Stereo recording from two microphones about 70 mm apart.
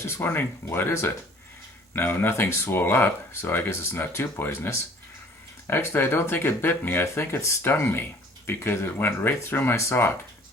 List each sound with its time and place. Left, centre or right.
0.0 s speech: left